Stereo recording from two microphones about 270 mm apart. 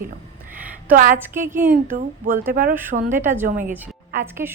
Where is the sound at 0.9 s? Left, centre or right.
Right.